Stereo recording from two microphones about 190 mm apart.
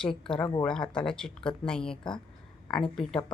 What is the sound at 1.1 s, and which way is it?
A woman's voice, 5° left (ahead or behind).